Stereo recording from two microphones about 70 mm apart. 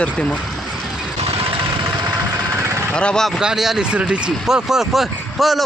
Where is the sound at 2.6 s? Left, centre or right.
Right.